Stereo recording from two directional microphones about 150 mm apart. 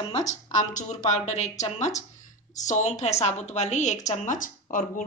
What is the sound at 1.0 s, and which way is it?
A woman's voice, 50° left (ahead or behind).